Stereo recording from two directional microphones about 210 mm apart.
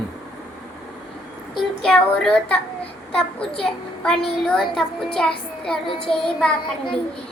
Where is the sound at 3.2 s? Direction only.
5° left (ahead or behind).